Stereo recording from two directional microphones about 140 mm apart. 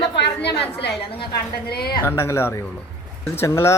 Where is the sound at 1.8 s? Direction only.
90° left.